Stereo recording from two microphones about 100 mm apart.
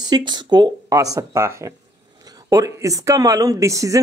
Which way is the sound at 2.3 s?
35° right (ahead or behind).